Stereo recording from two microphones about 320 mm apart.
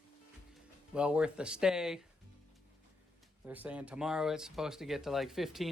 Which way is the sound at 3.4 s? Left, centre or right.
Centre.